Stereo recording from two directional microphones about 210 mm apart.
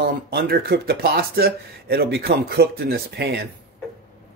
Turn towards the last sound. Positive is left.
turn(degrees=-50)  # may be behind; listen again after turning